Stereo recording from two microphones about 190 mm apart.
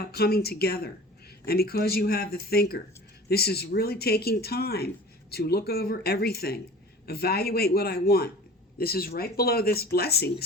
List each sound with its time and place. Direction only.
0.1 s speech: 55° left (ahead or behind)